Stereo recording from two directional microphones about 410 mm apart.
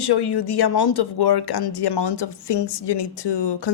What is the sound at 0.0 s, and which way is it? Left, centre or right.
A woman's voice, left.